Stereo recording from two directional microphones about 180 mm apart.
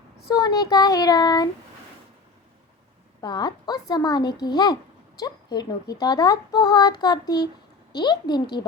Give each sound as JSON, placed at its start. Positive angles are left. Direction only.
{"t": 0.3, "sound": "speech", "side_deg": 20}
{"t": 3.2, "sound": "speech", "side_deg": 20}